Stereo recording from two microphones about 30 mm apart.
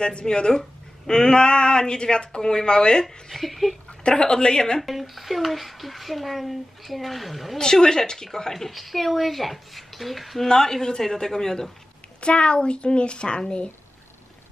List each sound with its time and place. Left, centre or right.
0.0 s speech: left
3.3 s a child's voice: centre
4.0 s speech: left
4.7 s a child's voice: centre
7.5 s speech: left
8.5 s a child's voice: centre
10.5 s speech: centre
12.2 s a woman's voice: left